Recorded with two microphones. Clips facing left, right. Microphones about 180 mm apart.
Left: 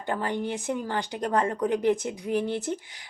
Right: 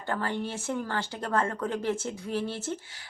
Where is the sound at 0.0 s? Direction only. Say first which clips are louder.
Left 2 dB; 15° left (ahead or behind).